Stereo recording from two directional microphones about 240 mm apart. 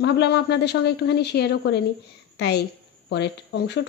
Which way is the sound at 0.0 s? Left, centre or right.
Left.